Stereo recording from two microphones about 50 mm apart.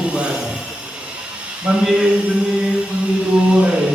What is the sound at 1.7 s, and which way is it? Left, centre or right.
Speech, right.